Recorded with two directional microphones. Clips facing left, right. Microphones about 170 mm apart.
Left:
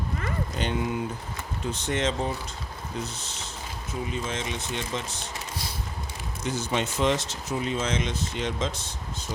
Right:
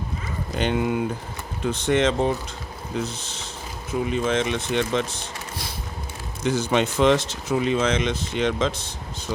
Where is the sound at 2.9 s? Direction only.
90° right.